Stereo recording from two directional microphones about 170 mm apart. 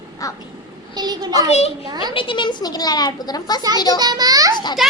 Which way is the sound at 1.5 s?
40° left (ahead or behind).